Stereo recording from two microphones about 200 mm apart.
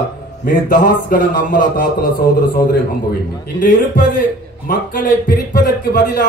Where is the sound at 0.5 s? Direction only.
45° left (ahead or behind).